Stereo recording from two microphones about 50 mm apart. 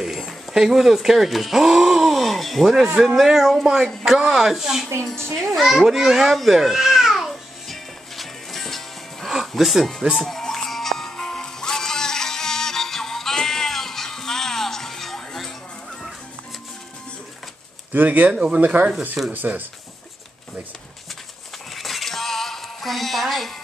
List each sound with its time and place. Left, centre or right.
0.0 s a sound: centre
0.5 s speech: centre
5.0 s a child's voice: centre
5.4 s babbling: centre
9.3 s speech: centre
10.1 s music: centre
17.9 s speech: right
18.3 s speech: centre
18.6 s speech: right
21.7 s music: centre